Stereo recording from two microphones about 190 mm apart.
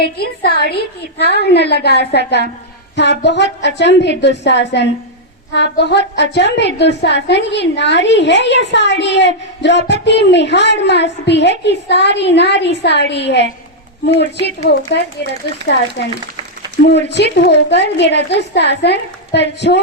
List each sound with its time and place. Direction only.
0.0 s a woman's voice: 55° left (ahead or behind)
16.8 s a woman's voice: 65° left (ahead or behind)